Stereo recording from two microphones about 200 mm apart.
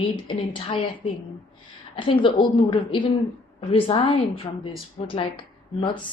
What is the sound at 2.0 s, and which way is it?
Speech, 25° left (ahead or behind).